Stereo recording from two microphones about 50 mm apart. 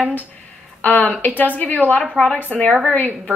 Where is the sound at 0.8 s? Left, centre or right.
Left.